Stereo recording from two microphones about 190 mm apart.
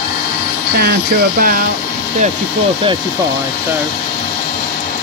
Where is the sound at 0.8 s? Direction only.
50° right (ahead or behind).